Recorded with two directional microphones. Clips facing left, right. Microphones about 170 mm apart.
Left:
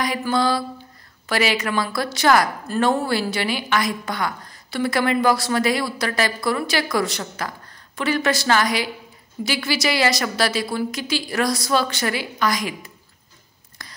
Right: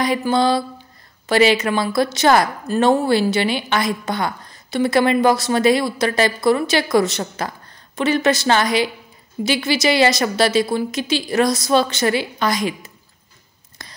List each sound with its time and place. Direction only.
0.0 s a woman's voice: 25° right (ahead or behind)